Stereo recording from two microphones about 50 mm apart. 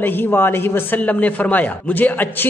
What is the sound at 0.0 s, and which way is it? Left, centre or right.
A man's voice, left.